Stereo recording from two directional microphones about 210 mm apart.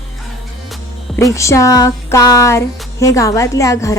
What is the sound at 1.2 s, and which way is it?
Speech, 15° left (ahead or behind).